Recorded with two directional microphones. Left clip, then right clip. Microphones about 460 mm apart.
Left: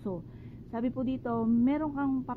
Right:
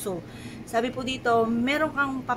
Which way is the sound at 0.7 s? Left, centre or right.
Centre.